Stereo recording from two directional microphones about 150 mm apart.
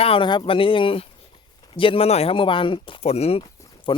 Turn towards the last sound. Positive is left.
turn(degrees=35)  # may be behind; listen again after turning